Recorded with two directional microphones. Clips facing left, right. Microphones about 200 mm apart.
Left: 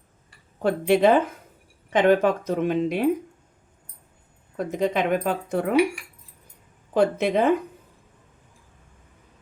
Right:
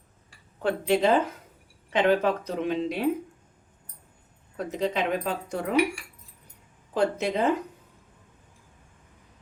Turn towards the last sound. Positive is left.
turn(degrees=55)  # may be behind; listen again after turning